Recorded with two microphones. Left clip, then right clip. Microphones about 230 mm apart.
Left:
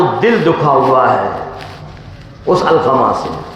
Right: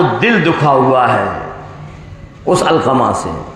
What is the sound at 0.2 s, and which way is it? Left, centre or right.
Speech, right.